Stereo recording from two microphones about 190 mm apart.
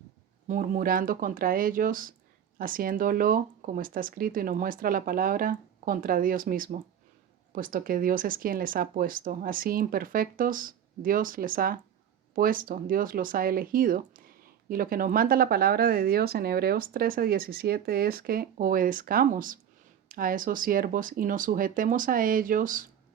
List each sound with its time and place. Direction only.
0.4 s speech: 45° right (ahead or behind)